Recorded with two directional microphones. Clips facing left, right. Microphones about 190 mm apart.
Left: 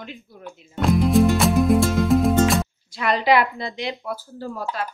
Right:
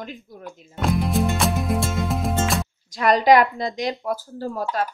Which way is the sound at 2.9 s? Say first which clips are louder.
Right 4 dB; 45° right (ahead or behind).